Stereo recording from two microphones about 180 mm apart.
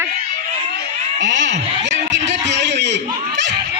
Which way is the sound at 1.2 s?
90° right.